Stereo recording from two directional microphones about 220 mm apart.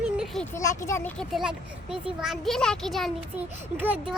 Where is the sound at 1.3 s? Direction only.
5° right (ahead or behind).